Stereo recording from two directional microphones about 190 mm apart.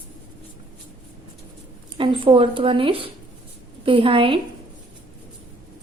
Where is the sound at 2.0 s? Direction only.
25° right (ahead or behind).